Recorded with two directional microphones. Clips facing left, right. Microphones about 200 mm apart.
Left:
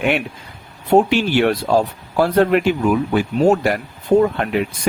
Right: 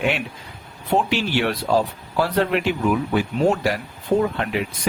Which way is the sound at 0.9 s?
50° left (ahead or behind).